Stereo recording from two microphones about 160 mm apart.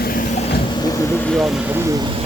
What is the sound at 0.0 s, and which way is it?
Vehicle, 65° left (ahead or behind).